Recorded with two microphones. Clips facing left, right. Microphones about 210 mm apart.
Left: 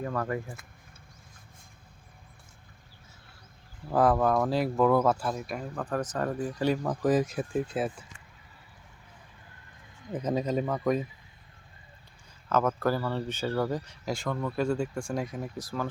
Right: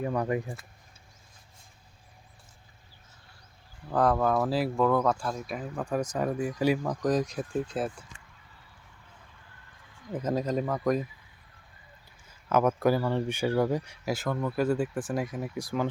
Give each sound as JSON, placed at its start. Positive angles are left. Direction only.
{"t": 0.0, "sound": "speech", "side_deg": -15}
{"t": 3.9, "sound": "speech", "side_deg": 5}
{"t": 6.8, "sound": "speech", "side_deg": 5}
{"t": 10.2, "sound": "speech", "side_deg": 0}
{"t": 12.5, "sound": "speech", "side_deg": -10}